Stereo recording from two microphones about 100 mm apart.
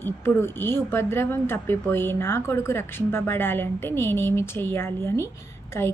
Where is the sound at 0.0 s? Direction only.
25° left (ahead or behind).